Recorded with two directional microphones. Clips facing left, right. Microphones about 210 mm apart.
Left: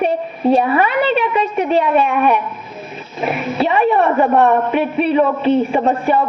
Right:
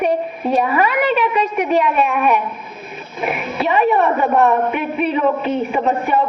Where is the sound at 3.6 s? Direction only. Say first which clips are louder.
Left 1 dB; 30° left (ahead or behind).